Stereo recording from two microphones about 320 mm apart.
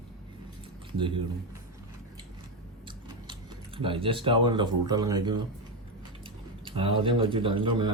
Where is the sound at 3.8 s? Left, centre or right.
Centre.